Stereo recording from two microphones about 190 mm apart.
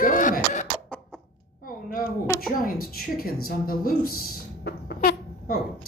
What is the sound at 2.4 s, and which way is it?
A woman's voice, 50° left (ahead or behind).